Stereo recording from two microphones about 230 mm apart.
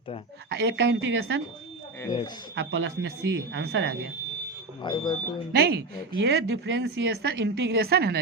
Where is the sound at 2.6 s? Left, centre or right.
Right.